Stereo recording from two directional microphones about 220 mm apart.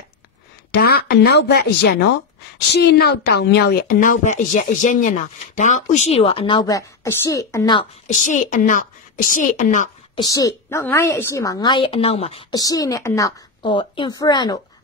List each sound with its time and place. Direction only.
0.8 s a woman's voice: 45° left (ahead or behind); by 7.8 s 15° left (ahead or behind)
8.1 s speech: 35° left (ahead or behind)
10.1 s a woman's voice: 15° left (ahead or behind)